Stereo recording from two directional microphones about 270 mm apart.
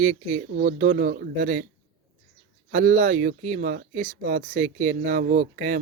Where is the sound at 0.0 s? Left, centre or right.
Right.